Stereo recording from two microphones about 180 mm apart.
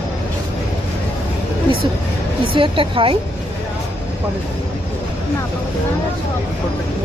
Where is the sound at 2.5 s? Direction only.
30° right (ahead or behind).